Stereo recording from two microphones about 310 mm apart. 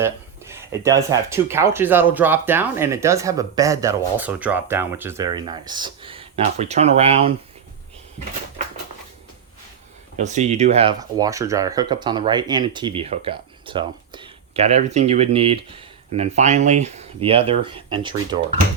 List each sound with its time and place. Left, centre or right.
0.0 s speech: centre
10.2 s speech: right